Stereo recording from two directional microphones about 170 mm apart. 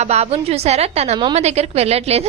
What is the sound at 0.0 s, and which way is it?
A woman's voice, 40° right (ahead or behind).